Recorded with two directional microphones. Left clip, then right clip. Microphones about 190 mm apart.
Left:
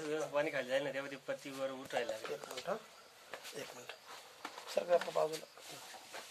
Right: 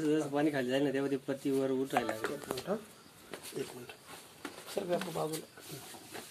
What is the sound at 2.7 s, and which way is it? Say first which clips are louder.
Speech: right 2 dB; 40° left (ahead or behind).